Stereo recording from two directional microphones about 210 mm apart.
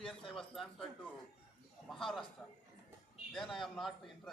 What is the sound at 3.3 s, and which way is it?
Speech, centre (ahead or behind).